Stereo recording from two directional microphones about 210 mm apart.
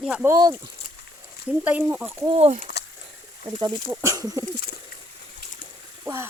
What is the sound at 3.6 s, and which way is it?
Speech, 15° right (ahead or behind).